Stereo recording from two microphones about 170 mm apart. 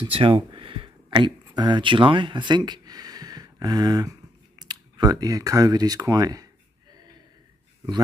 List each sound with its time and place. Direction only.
0.0 s speech: 30° right (ahead or behind)